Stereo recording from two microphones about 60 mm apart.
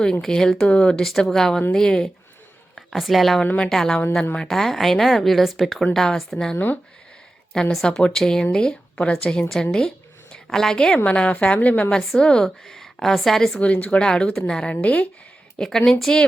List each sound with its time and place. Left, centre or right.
0.2 s a woman's voice: centre
2.7 s a woman's voice: centre; by 11.9 s left
11.9 s a woman's voice: centre
13.6 s a woman's voice: left
15.5 s a woman's voice: centre